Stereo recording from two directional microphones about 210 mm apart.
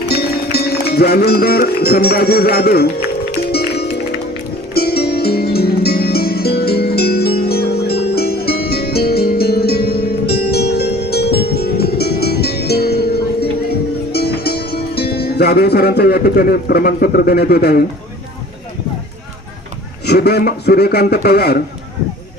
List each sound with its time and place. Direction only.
0.1 s speech: 50° left (ahead or behind)
3.5 s music: 50° left (ahead or behind)
14.1 s speech: 50° left (ahead or behind)
20.1 s speech: 50° left (ahead or behind)